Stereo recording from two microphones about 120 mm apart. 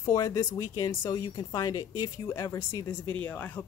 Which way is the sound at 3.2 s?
10° left (ahead or behind).